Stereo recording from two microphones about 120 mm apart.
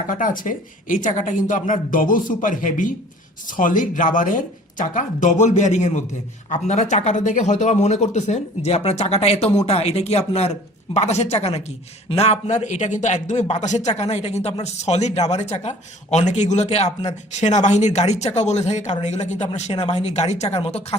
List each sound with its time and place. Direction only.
0.1 s speech: 90° left
6.9 s speech: 85° left; by 17.1 s 65° left (ahead or behind)
17.3 s speech: 80° left; by 20.8 s 65° left (ahead or behind)